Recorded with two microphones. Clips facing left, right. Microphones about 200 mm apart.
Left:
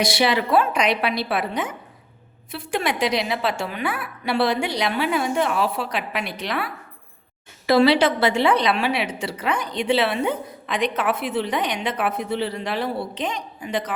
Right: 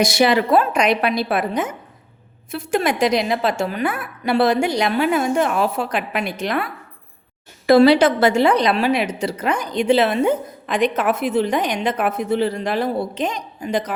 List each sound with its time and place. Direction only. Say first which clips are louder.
0.0 s a woman's voice: right 4 dB; 45° right (ahead or behind)
7.7 s a woman's voice: right 5 dB; 45° right (ahead or behind)